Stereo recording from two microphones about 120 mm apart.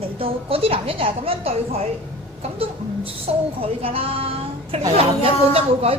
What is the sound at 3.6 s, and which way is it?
A woman's voice, 50° right (ahead or behind).